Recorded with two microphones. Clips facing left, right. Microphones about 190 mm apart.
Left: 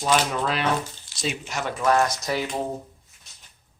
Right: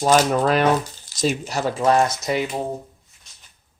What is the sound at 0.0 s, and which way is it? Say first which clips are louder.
Speech: right 6 dB; 45° right (ahead or behind).